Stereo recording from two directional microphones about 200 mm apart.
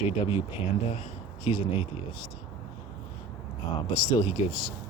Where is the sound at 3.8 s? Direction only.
20° left (ahead or behind).